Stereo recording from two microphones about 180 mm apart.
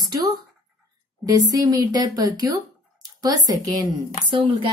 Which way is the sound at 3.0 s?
20° right (ahead or behind).